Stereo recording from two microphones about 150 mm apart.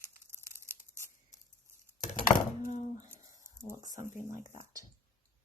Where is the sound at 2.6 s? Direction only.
55° left (ahead or behind).